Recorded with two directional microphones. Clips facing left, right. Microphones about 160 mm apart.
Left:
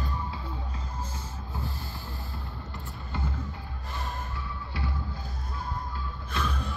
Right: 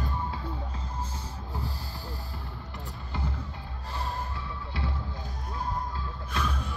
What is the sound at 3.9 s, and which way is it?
Music, 30° right (ahead or behind).